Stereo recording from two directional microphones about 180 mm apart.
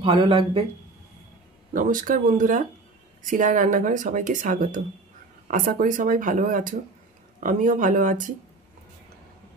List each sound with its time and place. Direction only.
0.0 s speech: 30° right (ahead or behind)
1.7 s speech: 50° right (ahead or behind)